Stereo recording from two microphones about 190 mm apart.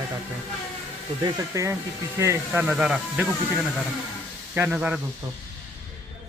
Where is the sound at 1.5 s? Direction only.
15° right (ahead or behind).